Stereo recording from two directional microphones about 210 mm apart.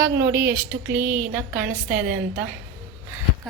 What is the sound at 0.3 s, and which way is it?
Speech, 50° right (ahead or behind).